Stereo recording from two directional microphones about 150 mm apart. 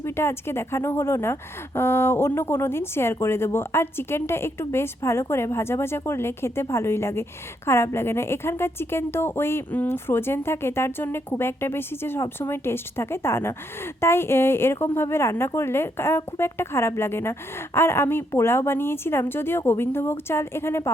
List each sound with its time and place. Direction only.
0.0 s speech: 15° left (ahead or behind)